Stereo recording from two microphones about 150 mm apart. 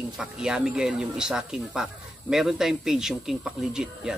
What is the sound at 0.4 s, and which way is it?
Speech, 5° right (ahead or behind).